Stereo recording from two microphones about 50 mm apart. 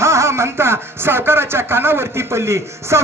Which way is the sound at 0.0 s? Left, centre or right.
Right.